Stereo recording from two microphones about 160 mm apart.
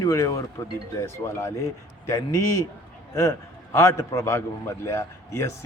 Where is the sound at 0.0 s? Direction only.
20° left (ahead or behind).